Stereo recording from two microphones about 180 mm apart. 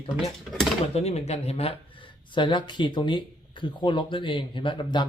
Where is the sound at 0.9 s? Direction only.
35° left (ahead or behind).